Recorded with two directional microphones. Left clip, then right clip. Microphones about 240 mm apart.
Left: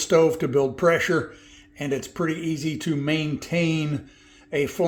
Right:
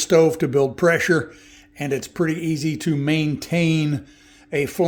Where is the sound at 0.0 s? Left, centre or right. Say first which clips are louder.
Right 3 dB; right.